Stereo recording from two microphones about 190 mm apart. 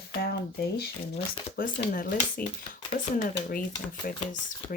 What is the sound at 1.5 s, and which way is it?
Speech, 50° left (ahead or behind).